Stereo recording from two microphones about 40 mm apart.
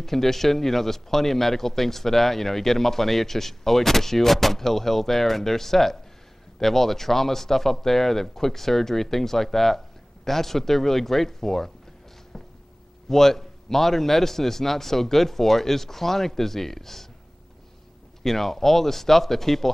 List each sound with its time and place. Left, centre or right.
0.0 s speech: centre
13.1 s speech: centre
18.2 s speech: centre